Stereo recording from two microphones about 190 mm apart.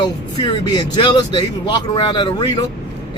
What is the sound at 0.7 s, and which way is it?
Speech, 25° left (ahead or behind).